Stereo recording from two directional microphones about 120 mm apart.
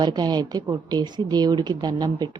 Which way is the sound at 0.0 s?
35° right (ahead or behind).